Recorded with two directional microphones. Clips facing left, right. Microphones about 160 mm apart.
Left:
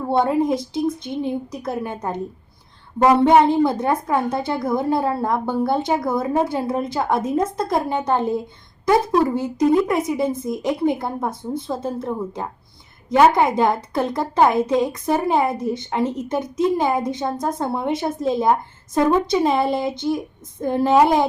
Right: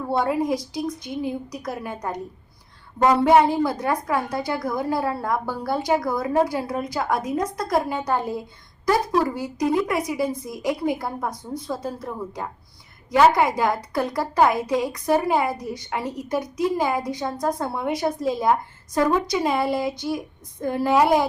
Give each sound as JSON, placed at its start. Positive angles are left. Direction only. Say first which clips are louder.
{"t": 0.1, "sound": "a woman's voice", "louder": "left 4 dB", "side_deg": 25}
{"t": 3.0, "sound": "a woman's voice", "louder": "left 3 dB", "side_deg": 20}